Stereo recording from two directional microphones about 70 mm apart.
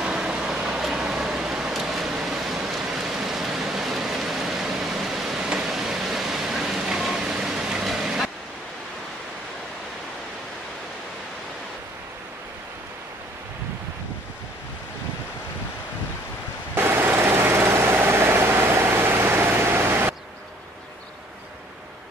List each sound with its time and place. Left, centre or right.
0.0 s vehicle: centre
16.7 s vehicle: right